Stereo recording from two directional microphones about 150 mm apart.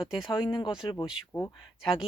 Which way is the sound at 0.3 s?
30° left (ahead or behind).